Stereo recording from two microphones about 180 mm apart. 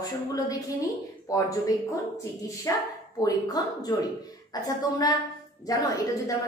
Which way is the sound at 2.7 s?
15° left (ahead or behind).